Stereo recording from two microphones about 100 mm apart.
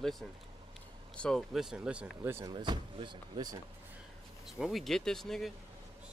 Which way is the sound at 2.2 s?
25° right (ahead or behind).